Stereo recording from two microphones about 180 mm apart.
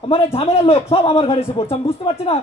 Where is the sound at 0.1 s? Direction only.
35° left (ahead or behind).